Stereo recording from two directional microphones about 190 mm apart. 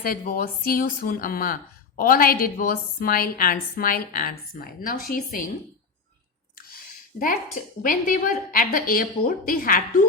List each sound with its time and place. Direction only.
0.0 s a woman's voice: 50° left (ahead or behind)
6.6 s a sound: 50° left (ahead or behind)
7.8 s a woman's voice: 45° left (ahead or behind)